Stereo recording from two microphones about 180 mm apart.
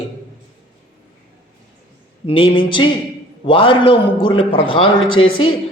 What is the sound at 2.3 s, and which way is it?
A man's voice, 30° left (ahead or behind).